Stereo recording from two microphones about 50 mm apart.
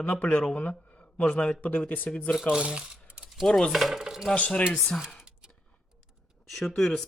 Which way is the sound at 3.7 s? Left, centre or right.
Centre.